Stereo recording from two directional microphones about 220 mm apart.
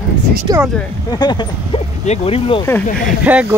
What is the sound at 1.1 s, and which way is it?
Speech, 20° left (ahead or behind).